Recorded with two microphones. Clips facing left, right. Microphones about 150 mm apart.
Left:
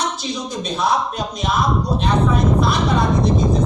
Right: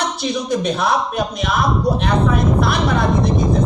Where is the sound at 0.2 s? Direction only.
65° right (ahead or behind).